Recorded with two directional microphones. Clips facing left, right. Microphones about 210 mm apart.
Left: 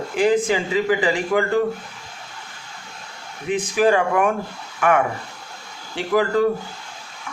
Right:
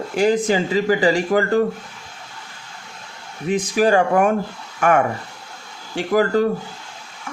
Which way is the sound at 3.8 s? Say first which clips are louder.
Right 2 dB; 40° right (ahead or behind).